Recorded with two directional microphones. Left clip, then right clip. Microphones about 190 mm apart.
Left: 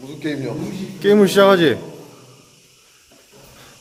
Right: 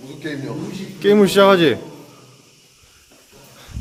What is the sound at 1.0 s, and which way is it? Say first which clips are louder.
Speech: even; centre (ahead or behind).